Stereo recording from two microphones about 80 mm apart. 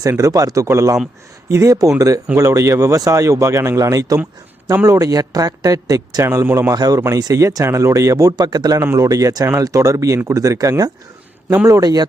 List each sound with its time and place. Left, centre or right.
0.0 s speech: right
6.2 s speech: right
6.7 s speech: right
11.8 s speech: right